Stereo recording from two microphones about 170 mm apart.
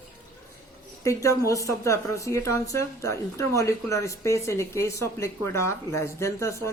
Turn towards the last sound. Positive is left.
turn(degrees=15)  # may be behind; listen again after turning